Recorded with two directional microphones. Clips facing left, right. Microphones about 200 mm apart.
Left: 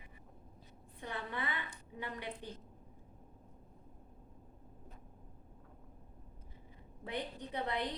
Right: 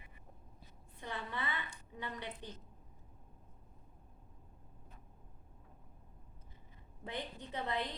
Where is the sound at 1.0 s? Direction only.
15° left (ahead or behind).